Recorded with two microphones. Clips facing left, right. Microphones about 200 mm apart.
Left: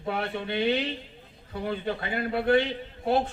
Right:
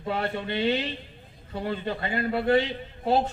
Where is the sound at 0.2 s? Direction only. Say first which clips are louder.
Right 2 dB; 60° right (ahead or behind).